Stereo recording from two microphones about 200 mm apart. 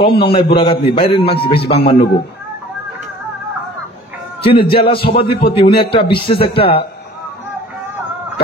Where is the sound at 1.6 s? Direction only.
55° left (ahead or behind).